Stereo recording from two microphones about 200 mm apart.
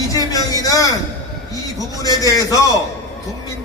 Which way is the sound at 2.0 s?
20° left (ahead or behind).